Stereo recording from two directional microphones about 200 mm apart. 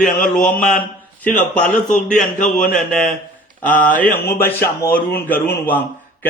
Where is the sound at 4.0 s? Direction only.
10° left (ahead or behind).